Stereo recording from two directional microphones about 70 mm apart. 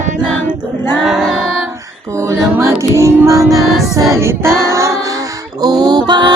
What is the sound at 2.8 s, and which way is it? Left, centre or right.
Music, right.